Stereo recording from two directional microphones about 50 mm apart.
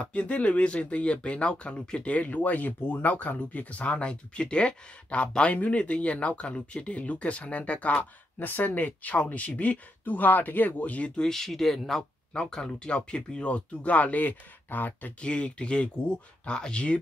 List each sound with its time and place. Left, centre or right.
0.0 s speech: left
8.0 s speech: left
11.1 s speech: centre; by 15.1 s left
15.1 s speech: left